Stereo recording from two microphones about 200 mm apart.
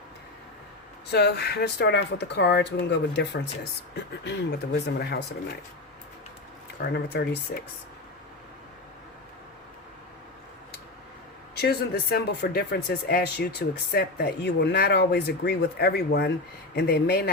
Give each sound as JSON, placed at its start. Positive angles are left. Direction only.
{"t": 1.1, "sound": "speech", "side_deg": 55}
{"t": 6.9, "sound": "speech", "side_deg": 60}
{"t": 11.6, "sound": "speech", "side_deg": 50}